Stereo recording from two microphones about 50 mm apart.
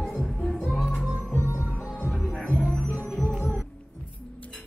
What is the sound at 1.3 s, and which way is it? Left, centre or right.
Music, left.